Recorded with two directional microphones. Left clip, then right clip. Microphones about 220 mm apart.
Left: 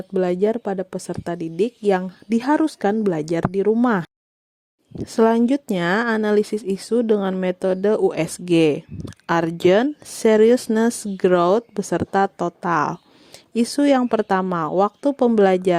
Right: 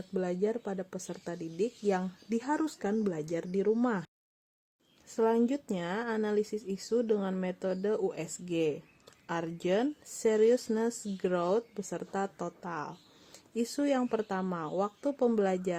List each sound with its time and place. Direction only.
0.1 s speech: 40° left (ahead or behind)
5.1 s speech: 40° left (ahead or behind)